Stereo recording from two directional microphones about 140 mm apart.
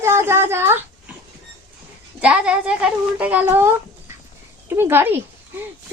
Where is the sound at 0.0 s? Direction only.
15° right (ahead or behind).